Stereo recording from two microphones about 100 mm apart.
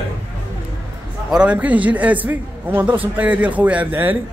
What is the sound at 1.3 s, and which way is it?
A man's voice, 10° right (ahead or behind).